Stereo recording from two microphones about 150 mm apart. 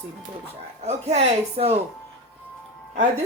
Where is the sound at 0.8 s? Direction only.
45° right (ahead or behind).